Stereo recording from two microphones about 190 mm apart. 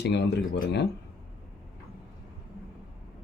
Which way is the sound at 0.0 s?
65° left (ahead or behind).